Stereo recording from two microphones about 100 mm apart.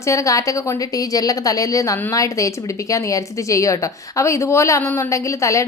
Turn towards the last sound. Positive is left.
turn(degrees=30)  # may be behind; listen again after turning